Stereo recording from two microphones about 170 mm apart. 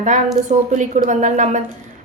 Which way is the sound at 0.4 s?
45° right (ahead or behind).